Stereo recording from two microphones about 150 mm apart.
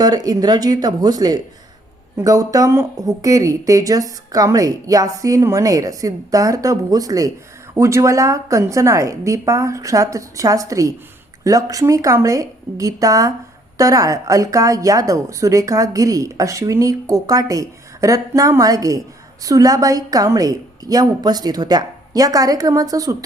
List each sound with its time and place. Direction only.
0.0 s a woman's voice: 25° right (ahead or behind)